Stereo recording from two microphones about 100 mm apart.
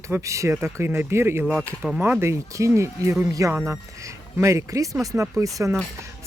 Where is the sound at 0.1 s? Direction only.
30° right (ahead or behind).